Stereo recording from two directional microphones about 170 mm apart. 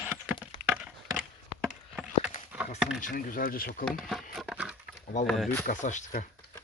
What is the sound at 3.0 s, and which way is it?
Speech, 50° left (ahead or behind).